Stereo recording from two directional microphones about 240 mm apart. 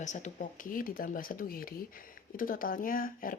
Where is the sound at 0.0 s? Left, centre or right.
Left.